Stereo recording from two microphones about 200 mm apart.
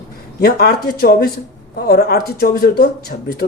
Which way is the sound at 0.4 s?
50° left (ahead or behind).